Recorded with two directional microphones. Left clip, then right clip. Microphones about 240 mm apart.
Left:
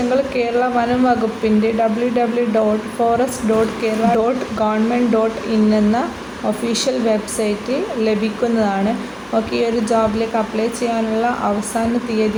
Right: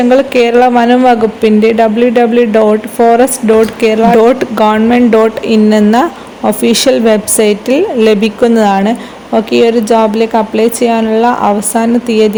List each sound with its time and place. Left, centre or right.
0.3 s speech: right
3.8 s speech: right